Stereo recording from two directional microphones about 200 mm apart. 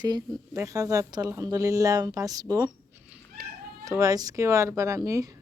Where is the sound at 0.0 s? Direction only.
20° right (ahead or behind).